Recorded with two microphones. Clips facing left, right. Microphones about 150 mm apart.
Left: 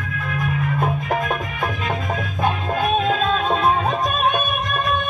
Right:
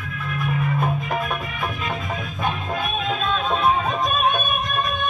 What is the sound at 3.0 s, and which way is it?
Music, 45° left (ahead or behind).